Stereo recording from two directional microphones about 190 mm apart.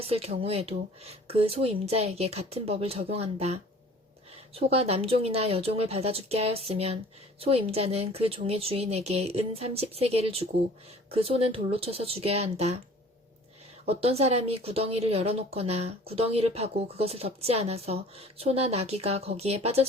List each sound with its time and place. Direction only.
0.1 s a woman's voice: 30° right (ahead or behind)
13.8 s a woman's voice: 30° right (ahead or behind)